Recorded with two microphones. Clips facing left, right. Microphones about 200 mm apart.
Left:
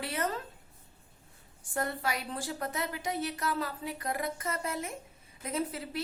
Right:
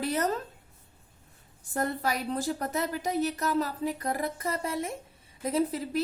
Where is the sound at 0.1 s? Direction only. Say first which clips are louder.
Right 5 dB; 40° right (ahead or behind).